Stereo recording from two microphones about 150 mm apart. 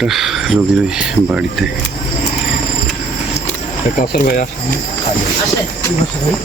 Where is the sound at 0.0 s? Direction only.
Centre (ahead or behind).